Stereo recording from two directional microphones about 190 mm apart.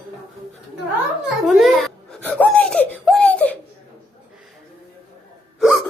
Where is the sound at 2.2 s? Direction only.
5° left (ahead or behind).